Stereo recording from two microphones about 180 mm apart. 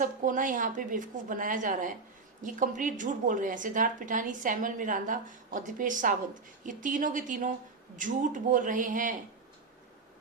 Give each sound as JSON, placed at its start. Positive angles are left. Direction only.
{"t": 0.0, "sound": "a woman's voice", "side_deg": -45}